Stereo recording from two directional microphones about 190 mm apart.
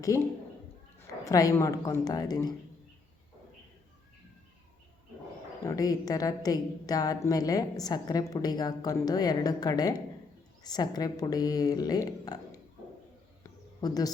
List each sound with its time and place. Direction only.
0.9 s a woman's voice: 15° left (ahead or behind)
5.6 s a woman's voice: 20° left (ahead or behind)
13.4 s a sound: 20° left (ahead or behind)